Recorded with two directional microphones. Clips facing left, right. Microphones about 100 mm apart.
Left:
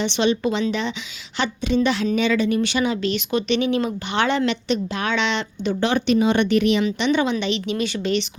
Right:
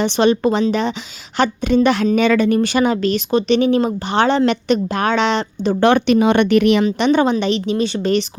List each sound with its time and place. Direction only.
0.0 s a woman's voice: 45° right (ahead or behind)
4.7 s speech: 50° right (ahead or behind)
5.8 s speech: 60° right (ahead or behind)
6.8 s speech: 40° right (ahead or behind)